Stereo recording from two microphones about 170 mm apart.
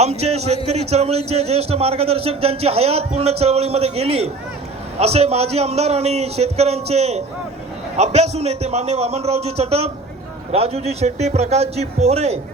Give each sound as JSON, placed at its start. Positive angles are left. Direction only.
{"t": 0.0, "sound": "speech", "side_deg": -40}